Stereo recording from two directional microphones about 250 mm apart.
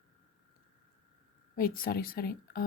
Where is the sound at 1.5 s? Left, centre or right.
Left.